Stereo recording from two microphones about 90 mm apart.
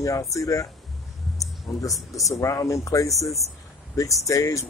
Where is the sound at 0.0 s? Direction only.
35° left (ahead or behind).